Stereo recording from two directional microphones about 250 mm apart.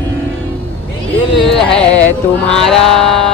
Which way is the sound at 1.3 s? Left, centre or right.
Left.